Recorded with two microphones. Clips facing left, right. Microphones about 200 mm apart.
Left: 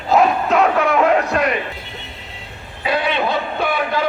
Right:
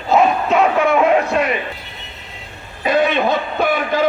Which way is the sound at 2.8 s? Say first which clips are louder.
Right 4 dB; 45° right (ahead or behind).